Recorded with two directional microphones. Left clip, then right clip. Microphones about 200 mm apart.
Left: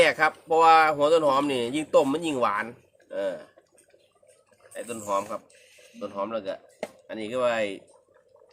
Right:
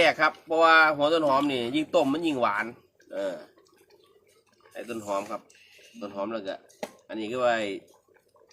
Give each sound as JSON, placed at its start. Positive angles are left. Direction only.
{"t": 0.0, "sound": "speech", "side_deg": 45}
{"t": 3.1, "sound": "speech", "side_deg": 25}
{"t": 4.7, "sound": "speech", "side_deg": 30}